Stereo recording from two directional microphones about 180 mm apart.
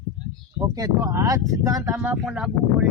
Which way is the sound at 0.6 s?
20° right (ahead or behind).